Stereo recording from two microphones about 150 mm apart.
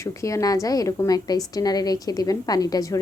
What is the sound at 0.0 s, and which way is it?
A woman's voice, 20° left (ahead or behind).